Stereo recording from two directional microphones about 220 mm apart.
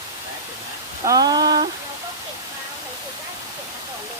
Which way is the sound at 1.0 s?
15° right (ahead or behind).